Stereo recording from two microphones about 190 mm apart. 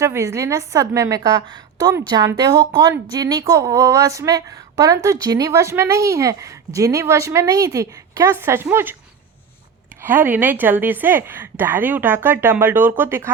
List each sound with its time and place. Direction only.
0.0 s a woman's voice: 15° right (ahead or behind)
10.0 s a woman's voice: 10° right (ahead or behind)